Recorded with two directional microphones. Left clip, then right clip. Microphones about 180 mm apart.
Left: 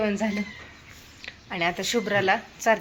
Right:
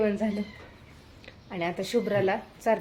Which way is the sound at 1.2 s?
Centre (ahead or behind).